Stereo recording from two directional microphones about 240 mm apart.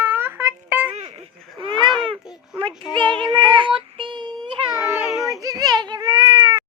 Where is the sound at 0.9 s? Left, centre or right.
Right.